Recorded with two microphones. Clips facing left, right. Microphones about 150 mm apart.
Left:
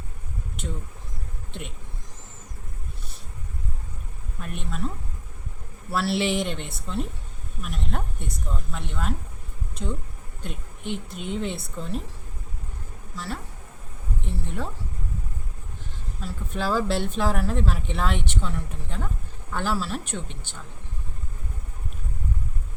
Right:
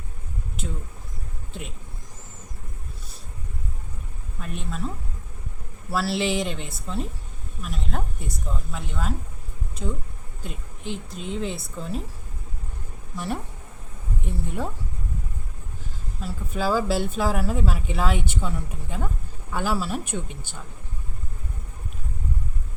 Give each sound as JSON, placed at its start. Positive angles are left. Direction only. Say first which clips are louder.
{"t": 4.4, "sound": "a woman's voice", "louder": "even", "side_deg": 0}
{"t": 5.9, "sound": "a woman's voice", "louder": "even", "side_deg": 0}
{"t": 13.1, "sound": "speech", "louder": "right 4 dB", "side_deg": -20}
{"t": 16.2, "sound": "speech", "louder": "right 2 dB", "side_deg": -5}